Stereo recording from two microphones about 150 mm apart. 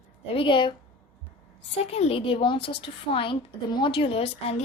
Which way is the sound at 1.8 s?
45° left (ahead or behind).